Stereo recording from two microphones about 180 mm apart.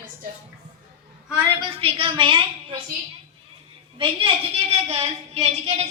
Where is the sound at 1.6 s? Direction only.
30° right (ahead or behind).